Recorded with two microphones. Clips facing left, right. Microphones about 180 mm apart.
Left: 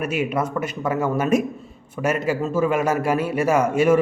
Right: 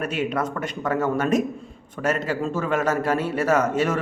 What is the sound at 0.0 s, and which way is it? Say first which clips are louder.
Speech: left 2 dB; 10° left (ahead or behind).